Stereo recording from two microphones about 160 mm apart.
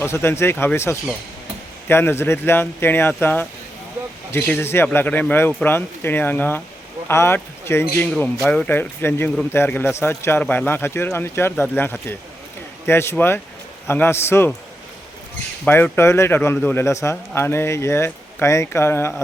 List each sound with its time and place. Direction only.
0.0 s speech: 15° left (ahead or behind)
15.6 s speech: 15° left (ahead or behind)